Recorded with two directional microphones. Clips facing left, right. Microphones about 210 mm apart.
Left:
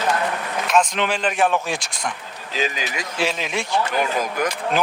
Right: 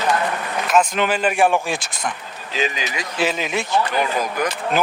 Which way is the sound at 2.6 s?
45° left (ahead or behind).